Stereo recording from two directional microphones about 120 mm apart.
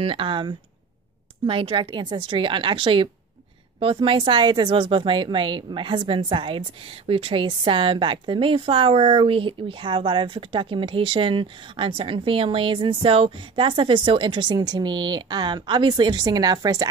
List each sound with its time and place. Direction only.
0.0 s a woman's voice: 45° right (ahead or behind)